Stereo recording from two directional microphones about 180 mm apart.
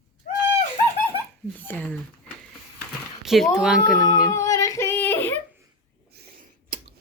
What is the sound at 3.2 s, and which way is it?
Speech, centre (ahead or behind).